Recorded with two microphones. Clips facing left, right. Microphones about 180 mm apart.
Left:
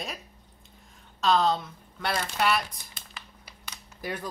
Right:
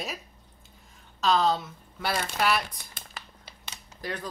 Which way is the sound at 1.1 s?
Centre (ahead or behind).